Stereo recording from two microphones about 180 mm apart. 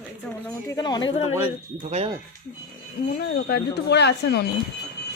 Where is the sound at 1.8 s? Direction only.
35° right (ahead or behind).